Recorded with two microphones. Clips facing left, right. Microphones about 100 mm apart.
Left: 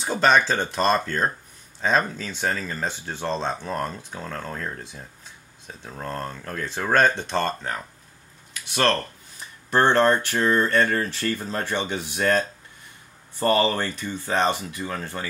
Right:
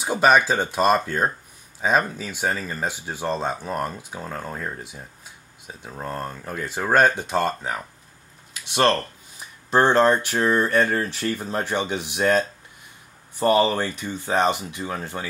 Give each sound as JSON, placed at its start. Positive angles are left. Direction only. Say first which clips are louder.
{"t": 0.0, "sound": "speech", "louder": "right 2 dB", "side_deg": -10}
{"t": 9.7, "sound": "speech", "louder": "right 1 dB", "side_deg": -15}